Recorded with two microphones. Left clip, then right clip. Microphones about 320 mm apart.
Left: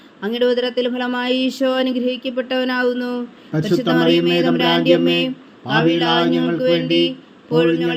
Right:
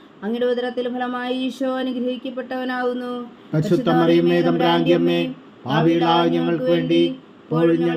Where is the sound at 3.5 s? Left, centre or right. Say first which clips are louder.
Left 1 dB; centre.